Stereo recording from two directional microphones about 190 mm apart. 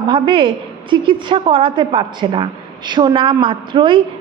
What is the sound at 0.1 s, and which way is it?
A woman's voice, 25° right (ahead or behind).